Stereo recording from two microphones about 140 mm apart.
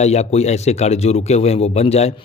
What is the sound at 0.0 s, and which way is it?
Speech, 50° left (ahead or behind).